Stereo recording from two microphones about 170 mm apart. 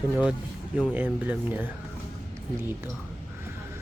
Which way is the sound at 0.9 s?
10° right (ahead or behind).